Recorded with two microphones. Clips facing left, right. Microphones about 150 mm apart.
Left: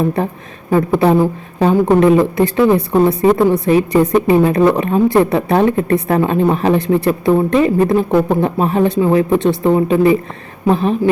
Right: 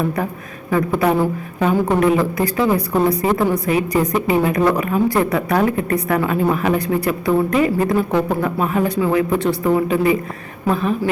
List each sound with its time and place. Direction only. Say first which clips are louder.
0.7 s a woman's voice: left 5 dB; 30° left (ahead or behind)